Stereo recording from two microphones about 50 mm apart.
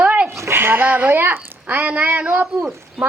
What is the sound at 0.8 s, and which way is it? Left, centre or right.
Speech, right.